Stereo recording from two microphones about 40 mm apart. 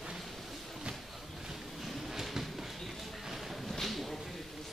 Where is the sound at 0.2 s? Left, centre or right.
Centre.